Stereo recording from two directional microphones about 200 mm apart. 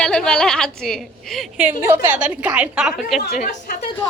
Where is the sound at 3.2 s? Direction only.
40° left (ahead or behind).